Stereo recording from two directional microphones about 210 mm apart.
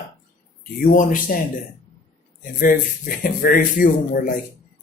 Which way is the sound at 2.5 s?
40° left (ahead or behind).